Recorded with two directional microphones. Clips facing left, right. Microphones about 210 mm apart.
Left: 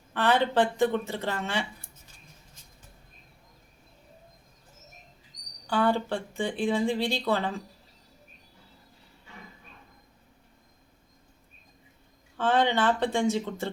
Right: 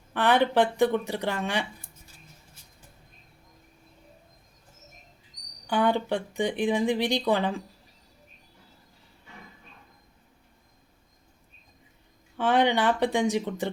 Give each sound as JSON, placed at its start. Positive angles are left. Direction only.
{"t": 0.1, "sound": "speech", "side_deg": -15}
{"t": 5.6, "sound": "speech", "side_deg": -15}
{"t": 12.4, "sound": "speech", "side_deg": -15}